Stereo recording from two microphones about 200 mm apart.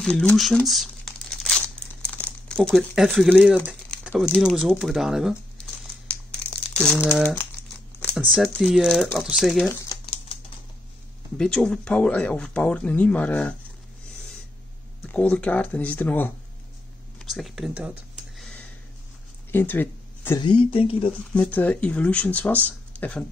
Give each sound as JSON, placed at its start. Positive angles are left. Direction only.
{"t": 0.0, "sound": "crumpling", "side_deg": 5}
{"t": 8.3, "sound": "speech", "side_deg": 5}
{"t": 9.7, "sound": "typing", "side_deg": 20}
{"t": 11.3, "sound": "speech", "side_deg": 5}
{"t": 15.0, "sound": "speech", "side_deg": 5}
{"t": 17.2, "sound": "a sound", "side_deg": 0}
{"t": 20.3, "sound": "speech", "side_deg": 25}
{"t": 21.4, "sound": "speech", "side_deg": 5}